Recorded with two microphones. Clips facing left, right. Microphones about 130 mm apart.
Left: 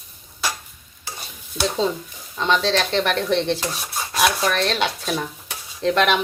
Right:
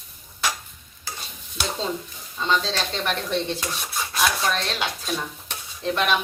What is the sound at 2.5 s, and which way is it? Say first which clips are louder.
Speech: left 5 dB; 75° left (ahead or behind).